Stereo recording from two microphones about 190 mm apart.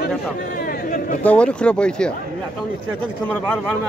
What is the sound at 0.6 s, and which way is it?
Chatter, 40° left (ahead or behind).